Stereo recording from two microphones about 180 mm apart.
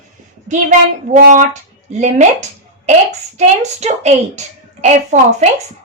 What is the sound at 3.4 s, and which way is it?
A child's voice, 40° right (ahead or behind).